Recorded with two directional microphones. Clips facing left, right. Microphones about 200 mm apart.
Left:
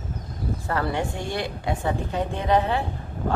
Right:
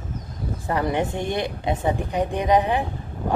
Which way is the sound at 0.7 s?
15° right (ahead or behind).